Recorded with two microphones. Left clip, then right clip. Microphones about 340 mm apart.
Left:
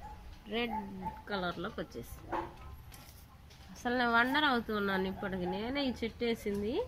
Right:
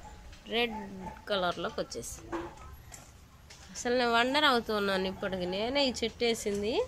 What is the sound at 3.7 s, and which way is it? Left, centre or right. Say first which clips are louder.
A woman's voice: right 2 dB; centre.